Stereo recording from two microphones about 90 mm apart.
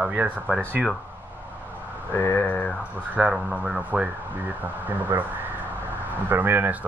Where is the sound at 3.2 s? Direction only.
15° right (ahead or behind).